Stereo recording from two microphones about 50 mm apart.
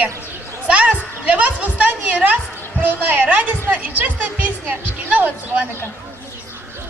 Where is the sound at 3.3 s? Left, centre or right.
Right.